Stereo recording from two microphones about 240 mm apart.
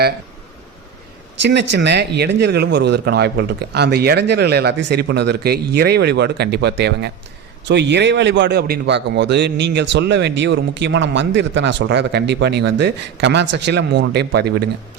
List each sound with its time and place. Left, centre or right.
1.4 s a man's voice: right